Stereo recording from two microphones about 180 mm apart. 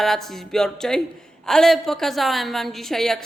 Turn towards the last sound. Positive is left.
turn(degrees=0)  # may be behind; listen again after turning